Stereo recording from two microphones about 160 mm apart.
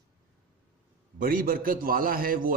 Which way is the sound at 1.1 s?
65° right (ahead or behind).